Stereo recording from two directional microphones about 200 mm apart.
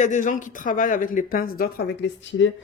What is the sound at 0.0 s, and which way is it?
Speech, 40° left (ahead or behind).